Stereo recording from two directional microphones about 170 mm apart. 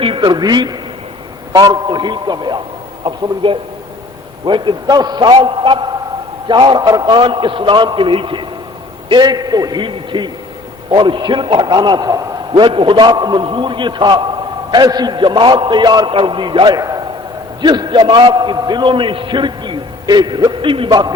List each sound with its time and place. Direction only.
0.0 s a man's voice: 30° right (ahead or behind)